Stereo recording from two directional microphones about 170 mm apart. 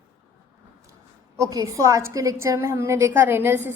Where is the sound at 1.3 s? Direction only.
20° right (ahead or behind).